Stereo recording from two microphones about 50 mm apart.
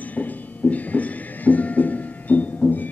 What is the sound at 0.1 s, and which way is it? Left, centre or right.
Music, left.